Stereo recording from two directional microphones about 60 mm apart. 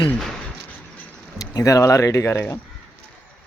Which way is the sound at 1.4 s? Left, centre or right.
Left.